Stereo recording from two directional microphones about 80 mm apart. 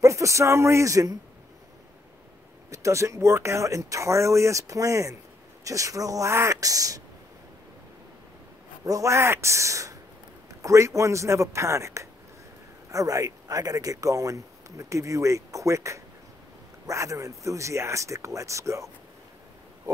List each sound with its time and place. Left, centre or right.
0.0 s speech: right
2.7 s speech: right
8.8 s speech: right